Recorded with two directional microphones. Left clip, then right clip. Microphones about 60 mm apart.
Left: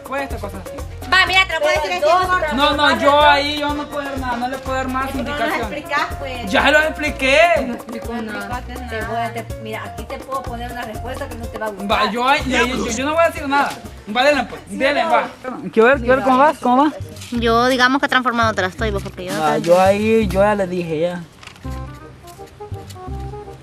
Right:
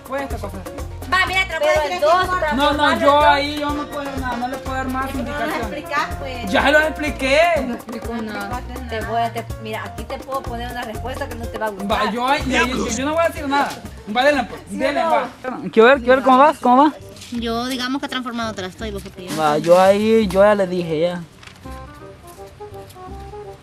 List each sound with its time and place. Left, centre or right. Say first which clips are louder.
0.1 s speech: left 1 dB; centre
1.1 s music: left 4 dB; left
2.0 s speech: left 2 dB; right
2.5 s speech: left 1 dB; centre
6.4 s speech: left 1 dB; centre
8.2 s music: even; centre
9.1 s speech: right 4 dB; right
11.5 s speech: left 2 dB; centre
14.8 s music: left 2 dB; left
15.4 s speech: right 4 dB; right
17.3 s speech: left 9 dB; left
19.3 s speech: right 1 dB; right